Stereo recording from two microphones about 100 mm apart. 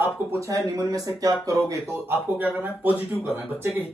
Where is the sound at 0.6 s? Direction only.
35° right (ahead or behind).